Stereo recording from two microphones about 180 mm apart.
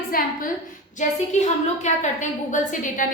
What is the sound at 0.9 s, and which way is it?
A woman's voice, 40° left (ahead or behind).